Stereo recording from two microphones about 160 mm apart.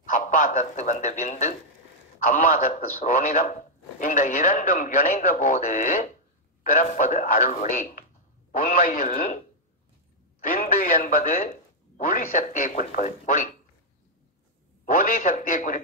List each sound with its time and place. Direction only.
0.1 s speech: 50° left (ahead or behind)
10.4 s speech: 60° left (ahead or behind)
14.9 s speech: 60° left (ahead or behind)